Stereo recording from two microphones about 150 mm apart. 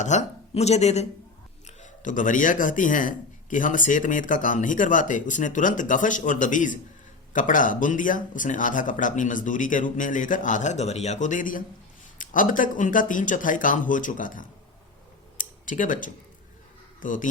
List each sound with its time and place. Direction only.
0.0 s speech: 50° left (ahead or behind)
1.6 s speech: 55° left (ahead or behind)
15.4 s a sound: 60° left (ahead or behind)
17.0 s speech: 60° left (ahead or behind)